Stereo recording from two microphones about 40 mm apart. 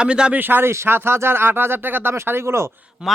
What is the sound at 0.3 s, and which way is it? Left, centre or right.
Speech, right.